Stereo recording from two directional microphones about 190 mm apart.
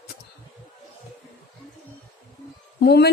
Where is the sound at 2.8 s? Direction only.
60° left (ahead or behind).